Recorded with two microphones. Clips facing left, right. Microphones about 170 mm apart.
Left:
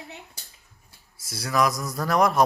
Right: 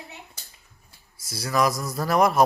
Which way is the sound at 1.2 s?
Centre (ahead or behind).